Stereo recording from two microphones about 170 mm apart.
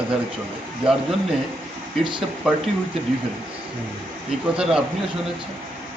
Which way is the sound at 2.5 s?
5° right (ahead or behind).